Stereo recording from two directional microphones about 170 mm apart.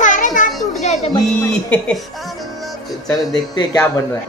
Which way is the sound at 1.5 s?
5° left (ahead or behind).